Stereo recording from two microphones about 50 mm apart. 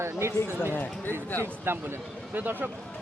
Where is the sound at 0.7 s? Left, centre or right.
Left.